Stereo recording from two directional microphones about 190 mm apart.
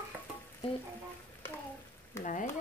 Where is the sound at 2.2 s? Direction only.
45° left (ahead or behind).